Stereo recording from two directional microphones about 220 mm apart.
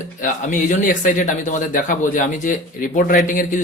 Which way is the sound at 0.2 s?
35° left (ahead or behind).